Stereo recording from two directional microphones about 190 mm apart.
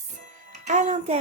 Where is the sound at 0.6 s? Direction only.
40° right (ahead or behind).